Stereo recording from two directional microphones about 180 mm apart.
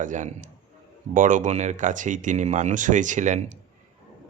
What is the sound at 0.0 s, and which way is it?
Speech, 45° right (ahead or behind).